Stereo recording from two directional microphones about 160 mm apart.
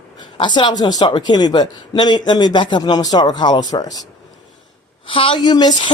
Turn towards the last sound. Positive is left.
turn(degrees=25)  # may be behind; listen again after turning